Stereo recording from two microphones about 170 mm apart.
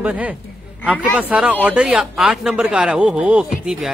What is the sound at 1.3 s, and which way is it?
Speech, 10° right (ahead or behind).